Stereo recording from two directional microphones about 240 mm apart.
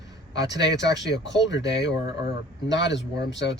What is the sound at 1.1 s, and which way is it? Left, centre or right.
Speech, left.